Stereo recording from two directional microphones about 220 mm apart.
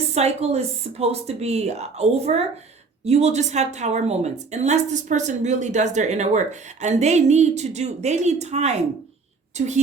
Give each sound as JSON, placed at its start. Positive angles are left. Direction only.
{"t": 0.1, "sound": "a woman's voice", "side_deg": -30}